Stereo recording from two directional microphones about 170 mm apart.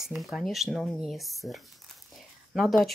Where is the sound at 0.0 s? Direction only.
Centre (ahead or behind).